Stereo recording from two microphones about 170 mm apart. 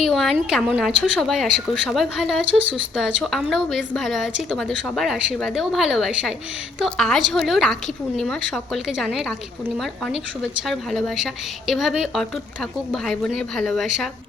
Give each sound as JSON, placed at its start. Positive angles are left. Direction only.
{"t": 0.0, "sound": "a woman's voice", "side_deg": 0}
{"t": 2.6, "sound": "speech", "side_deg": -30}
{"t": 3.2, "sound": "a woman's voice", "side_deg": 0}
{"t": 10.7, "sound": "a woman's voice", "side_deg": 0}